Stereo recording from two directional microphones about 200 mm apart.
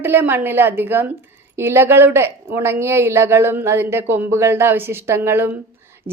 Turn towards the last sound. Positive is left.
turn(degrees=-10)  # may be behind; listen again after turning